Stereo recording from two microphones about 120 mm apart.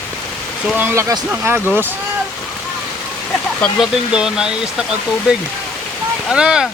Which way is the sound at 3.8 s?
5° right (ahead or behind).